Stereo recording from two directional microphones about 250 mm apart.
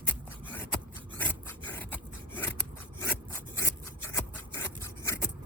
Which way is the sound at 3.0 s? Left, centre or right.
Centre.